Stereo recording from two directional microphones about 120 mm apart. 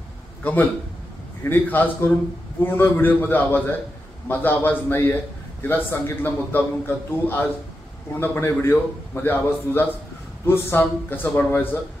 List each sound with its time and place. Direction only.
0.4 s a man's voice: 15° left (ahead or behind)